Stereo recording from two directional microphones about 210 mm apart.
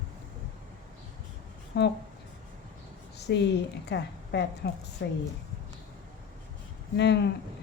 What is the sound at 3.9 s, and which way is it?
A woman's voice, 55° left (ahead or behind).